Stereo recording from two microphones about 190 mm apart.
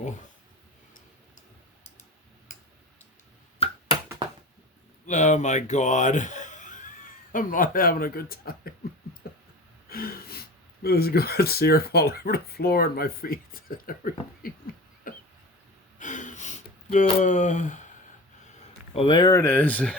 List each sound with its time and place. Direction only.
3.6 s finger snapping: 30° left (ahead or behind)
5.0 s speech: 40° left (ahead or behind)
9.2 s a sound: 55° left (ahead or behind)
9.9 s gasp: 50° left (ahead or behind)
10.8 s speech: 55° left (ahead or behind)
15.1 s a sound: 45° left (ahead or behind)
18.9 s speech: 25° left (ahead or behind); by 20.0 s 5° left (ahead or behind)